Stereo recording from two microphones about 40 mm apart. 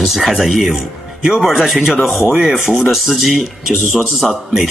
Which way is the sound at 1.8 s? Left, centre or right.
Centre.